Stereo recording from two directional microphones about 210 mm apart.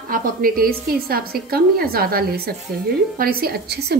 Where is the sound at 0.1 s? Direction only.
45° right (ahead or behind).